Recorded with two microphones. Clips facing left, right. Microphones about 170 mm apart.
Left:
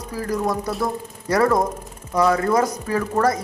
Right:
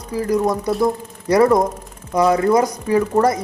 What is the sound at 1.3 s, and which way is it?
Speech, 20° right (ahead or behind).